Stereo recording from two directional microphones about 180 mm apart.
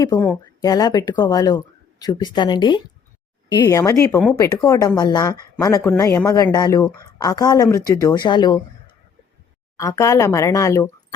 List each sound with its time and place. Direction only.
0.0 s speech: 20° left (ahead or behind)